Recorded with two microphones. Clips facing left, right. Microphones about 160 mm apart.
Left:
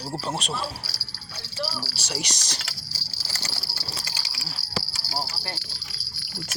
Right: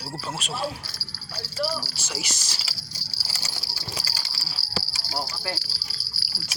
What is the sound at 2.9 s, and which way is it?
Vehicle, 10° right (ahead or behind).